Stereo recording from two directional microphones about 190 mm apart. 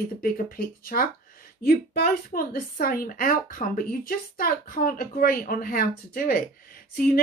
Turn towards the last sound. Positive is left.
turn(degrees=50)  # may be behind; listen again after turning